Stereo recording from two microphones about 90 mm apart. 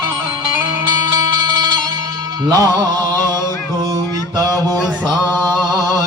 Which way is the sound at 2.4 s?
45° right (ahead or behind).